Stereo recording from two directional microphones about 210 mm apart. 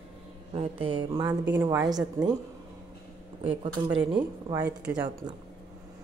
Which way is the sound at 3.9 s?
20° right (ahead or behind).